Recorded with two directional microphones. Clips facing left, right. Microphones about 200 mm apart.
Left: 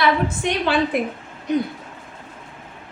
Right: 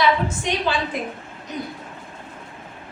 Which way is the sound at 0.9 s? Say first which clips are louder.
Left 6 dB; 60° left (ahead or behind).